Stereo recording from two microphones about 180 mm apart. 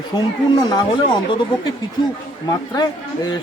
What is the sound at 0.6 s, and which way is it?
Speech, 25° left (ahead or behind).